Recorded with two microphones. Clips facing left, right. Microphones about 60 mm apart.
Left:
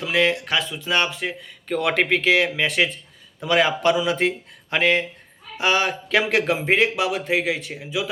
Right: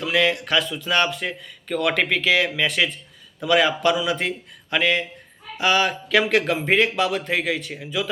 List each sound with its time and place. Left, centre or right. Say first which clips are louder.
0.0 s a man's voice: even; left